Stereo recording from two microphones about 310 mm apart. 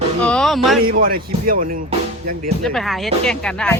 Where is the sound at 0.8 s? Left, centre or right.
Right.